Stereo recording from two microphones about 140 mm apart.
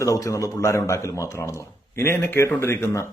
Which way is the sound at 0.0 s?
25° left (ahead or behind).